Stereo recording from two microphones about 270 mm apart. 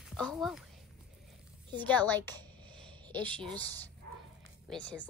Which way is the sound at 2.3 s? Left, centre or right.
Centre.